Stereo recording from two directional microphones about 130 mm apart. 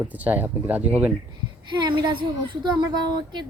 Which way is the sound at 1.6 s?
35° right (ahead or behind).